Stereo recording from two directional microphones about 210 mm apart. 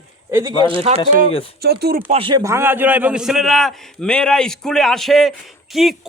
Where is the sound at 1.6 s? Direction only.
50° right (ahead or behind).